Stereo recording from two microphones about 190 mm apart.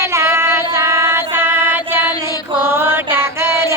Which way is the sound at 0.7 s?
15° right (ahead or behind).